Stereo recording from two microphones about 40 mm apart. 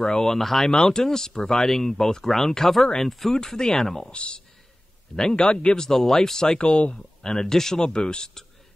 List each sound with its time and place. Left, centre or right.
0.0 s speech: centre
0.7 s speech: centre
4.1 s a man's voice: left
5.1 s a man's voice: centre
5.9 s speech: centre
6.6 s a man's voice: left
7.0 s speech: centre